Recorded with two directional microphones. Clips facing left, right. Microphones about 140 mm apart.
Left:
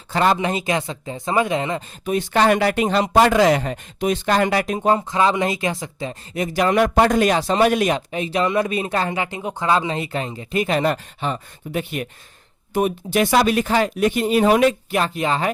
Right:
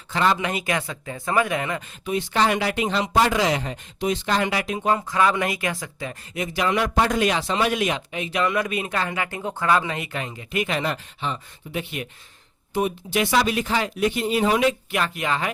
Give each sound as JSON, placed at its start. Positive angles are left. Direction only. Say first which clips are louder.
{"t": 0.1, "sound": "speech", "louder": "left 3 dB", "side_deg": 40}
{"t": 0.3, "sound": "speech", "louder": "left 4 dB", "side_deg": 25}
{"t": 2.0, "sound": "speech", "louder": "left 5 dB", "side_deg": 50}
{"t": 4.9, "sound": "speech", "louder": "left 2 dB", "side_deg": 25}
{"t": 6.3, "sound": "a man's voice", "louder": "left 5 dB", "side_deg": 40}